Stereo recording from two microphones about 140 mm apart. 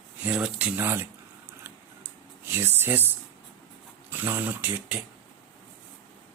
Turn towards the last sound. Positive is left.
turn(degrees=-10)  # may be behind; listen again after turning